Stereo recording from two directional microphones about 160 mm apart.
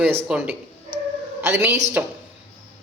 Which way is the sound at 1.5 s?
15° right (ahead or behind).